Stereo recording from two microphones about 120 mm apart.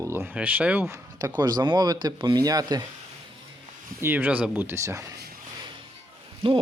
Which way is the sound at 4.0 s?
15° right (ahead or behind).